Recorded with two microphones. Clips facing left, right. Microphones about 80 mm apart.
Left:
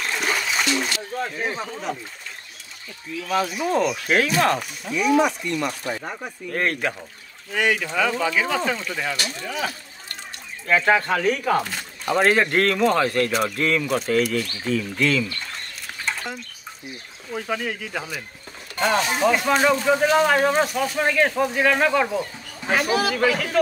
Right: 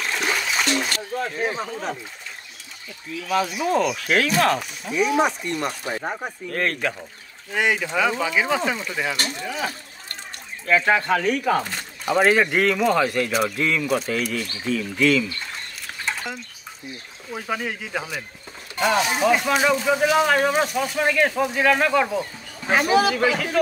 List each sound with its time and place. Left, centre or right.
0.0 s trickle: centre
1.1 s speech: centre
1.6 s speech: right
3.3 s speech: centre
5.2 s speech: right
6.5 s speech: centre
7.5 s speech: centre
10.7 s speech: centre
16.1 s a sound: centre
17.3 s speech: centre
22.7 s a man's voice: right
23.3 s speech: centre